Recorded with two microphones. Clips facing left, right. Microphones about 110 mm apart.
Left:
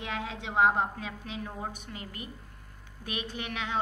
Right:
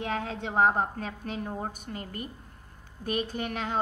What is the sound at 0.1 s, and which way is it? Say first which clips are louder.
A woman's voice: even; 45° right (ahead or behind).